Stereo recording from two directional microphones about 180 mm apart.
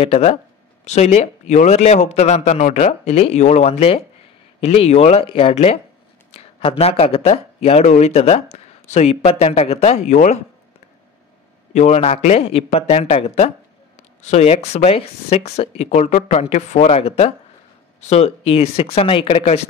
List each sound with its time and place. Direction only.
0.0 s speech: 35° left (ahead or behind)
6.3 s a sound: 35° left (ahead or behind)
6.8 s speech: 35° left (ahead or behind)
11.7 s speech: 40° left (ahead or behind)